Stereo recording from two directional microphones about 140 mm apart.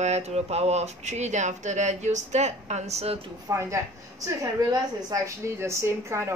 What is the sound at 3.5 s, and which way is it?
A woman's voice, 20° right (ahead or behind).